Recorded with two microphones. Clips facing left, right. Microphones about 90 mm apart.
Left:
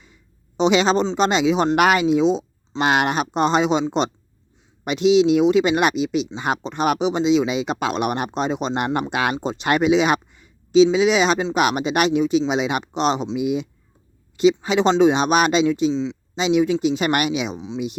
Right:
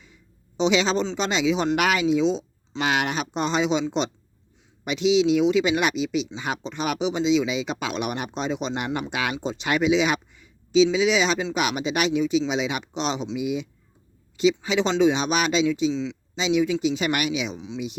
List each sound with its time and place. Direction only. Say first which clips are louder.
0.0 s a sound: even; 50° left (ahead or behind)
1.1 s speech: left 5 dB; 50° left (ahead or behind)
4.9 s speech: left 4 dB; 50° left (ahead or behind)
15.9 s speech: left 4 dB; 30° left (ahead or behind)
16.3 s speech: left 4 dB; 50° left (ahead or behind)